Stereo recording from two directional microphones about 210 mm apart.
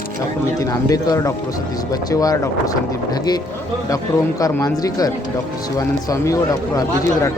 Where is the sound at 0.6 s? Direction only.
15° left (ahead or behind).